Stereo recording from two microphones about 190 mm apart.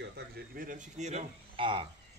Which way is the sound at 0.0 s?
60° right (ahead or behind).